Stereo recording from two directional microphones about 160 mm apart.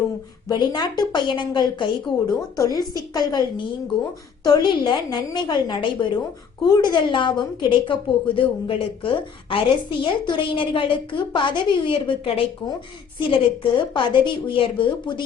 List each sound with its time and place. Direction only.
0.4 s a woman's voice: 25° left (ahead or behind)
4.4 s a woman's voice: 25° left (ahead or behind)